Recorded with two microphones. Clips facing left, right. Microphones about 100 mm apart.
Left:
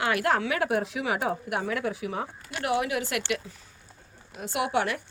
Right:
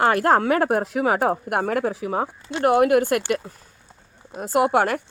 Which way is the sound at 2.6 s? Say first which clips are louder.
Right 11 dB; 50° right (ahead or behind).